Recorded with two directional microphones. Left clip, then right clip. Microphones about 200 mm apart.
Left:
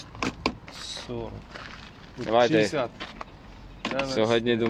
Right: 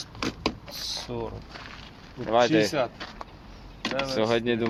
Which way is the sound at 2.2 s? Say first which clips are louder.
Even; 10° left (ahead or behind).